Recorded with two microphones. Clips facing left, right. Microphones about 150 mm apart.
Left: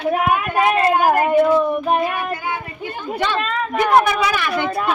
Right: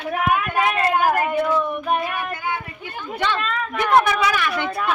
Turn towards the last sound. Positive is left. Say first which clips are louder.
# left 2 dB
turn(degrees=20)  # may be behind; listen again after turning